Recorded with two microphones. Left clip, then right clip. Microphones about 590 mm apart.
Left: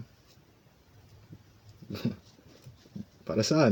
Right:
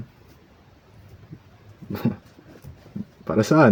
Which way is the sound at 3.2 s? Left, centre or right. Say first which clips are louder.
Right 8 dB; left.